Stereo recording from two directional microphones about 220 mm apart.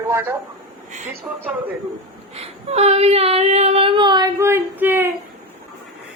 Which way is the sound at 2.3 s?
30° right (ahead or behind).